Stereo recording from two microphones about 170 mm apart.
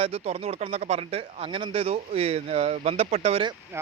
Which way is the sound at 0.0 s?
35° right (ahead or behind).